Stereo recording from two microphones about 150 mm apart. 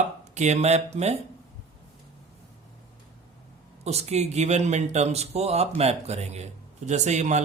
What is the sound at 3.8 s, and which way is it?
Speech, 45° right (ahead or behind).